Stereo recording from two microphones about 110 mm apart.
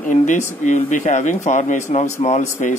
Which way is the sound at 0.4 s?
90° left.